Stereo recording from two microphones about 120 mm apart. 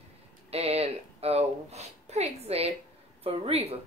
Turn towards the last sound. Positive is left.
turn(degrees=-55)  # may be behind; listen again after turning